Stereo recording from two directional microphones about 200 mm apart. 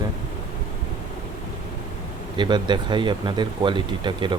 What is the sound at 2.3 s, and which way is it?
Speech, 20° right (ahead or behind).